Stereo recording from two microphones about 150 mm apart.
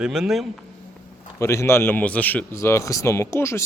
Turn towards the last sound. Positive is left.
turn(degrees=20)  # may be behind; listen again after turning